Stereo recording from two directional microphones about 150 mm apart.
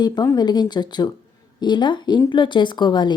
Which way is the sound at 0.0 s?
25° left (ahead or behind).